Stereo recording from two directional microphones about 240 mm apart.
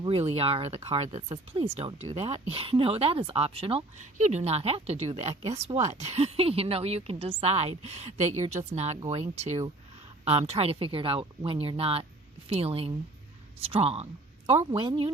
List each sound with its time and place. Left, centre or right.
0.0 s speech: right